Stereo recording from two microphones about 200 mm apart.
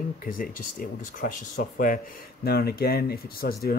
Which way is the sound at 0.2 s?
45° left (ahead or behind).